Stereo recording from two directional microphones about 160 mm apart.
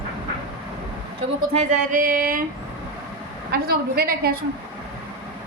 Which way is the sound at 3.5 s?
75° right (ahead or behind).